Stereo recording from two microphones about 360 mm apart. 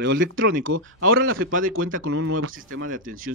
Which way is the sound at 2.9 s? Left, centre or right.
Right.